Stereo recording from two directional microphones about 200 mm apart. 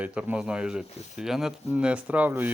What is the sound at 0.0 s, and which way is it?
Speech, 5° right (ahead or behind).